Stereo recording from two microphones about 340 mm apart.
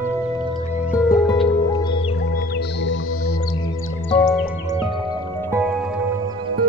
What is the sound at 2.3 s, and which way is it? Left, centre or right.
Music, left.